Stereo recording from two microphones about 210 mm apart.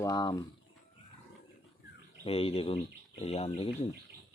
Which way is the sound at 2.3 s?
30° left (ahead or behind).